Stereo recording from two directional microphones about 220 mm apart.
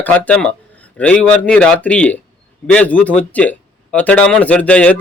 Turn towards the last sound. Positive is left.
turn(degrees=5)  # may be behind; listen again after turning